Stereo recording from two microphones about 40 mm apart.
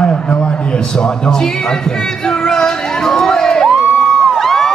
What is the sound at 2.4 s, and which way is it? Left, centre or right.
Crowd, centre.